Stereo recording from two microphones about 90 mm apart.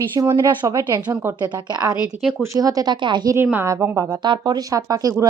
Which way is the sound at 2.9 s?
60° right (ahead or behind).